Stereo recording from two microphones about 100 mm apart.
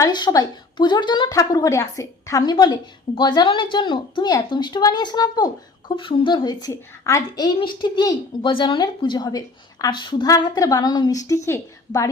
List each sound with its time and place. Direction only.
0.1 s speech: 45° left (ahead or behind)
1.3 s a woman's voice: 35° left (ahead or behind)
6.0 s speech: 60° left (ahead or behind); by 7.2 s 35° left (ahead or behind)
7.3 s speech: 45° left (ahead or behind)
10.2 s a woman's voice: 40° left (ahead or behind)